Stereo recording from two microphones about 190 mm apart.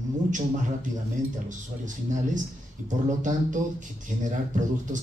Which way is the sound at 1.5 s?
40° right (ahead or behind).